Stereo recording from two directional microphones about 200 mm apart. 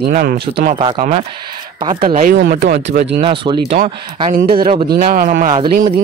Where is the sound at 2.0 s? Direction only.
45° right (ahead or behind).